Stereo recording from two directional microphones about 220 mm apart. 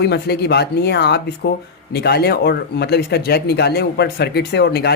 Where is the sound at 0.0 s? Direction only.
50° left (ahead or behind).